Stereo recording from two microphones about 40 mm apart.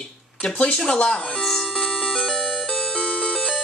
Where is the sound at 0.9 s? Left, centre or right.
Left.